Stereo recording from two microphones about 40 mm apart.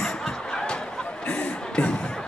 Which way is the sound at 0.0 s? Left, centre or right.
Centre.